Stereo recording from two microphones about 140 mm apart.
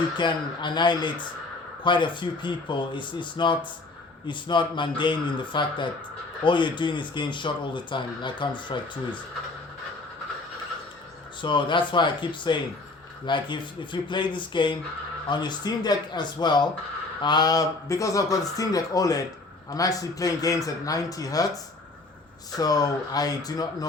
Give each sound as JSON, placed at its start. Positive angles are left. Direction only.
{"t": 0.2, "sound": "speech", "side_deg": 35}
{"t": 11.4, "sound": "speech", "side_deg": 35}